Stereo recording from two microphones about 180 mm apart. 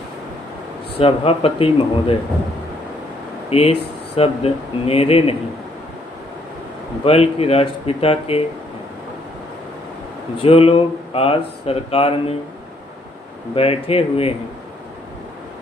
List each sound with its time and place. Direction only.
0.9 s speech: 30° left (ahead or behind)
3.5 s speech: 35° left (ahead or behind)
7.0 s speech: 35° left (ahead or behind)
10.4 s speech: 30° left (ahead or behind)
13.6 s speech: 35° left (ahead or behind)